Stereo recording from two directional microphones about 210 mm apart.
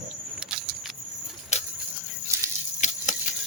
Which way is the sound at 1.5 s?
30° left (ahead or behind).